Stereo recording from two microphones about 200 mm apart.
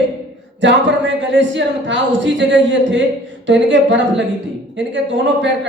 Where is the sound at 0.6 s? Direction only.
65° right (ahead or behind).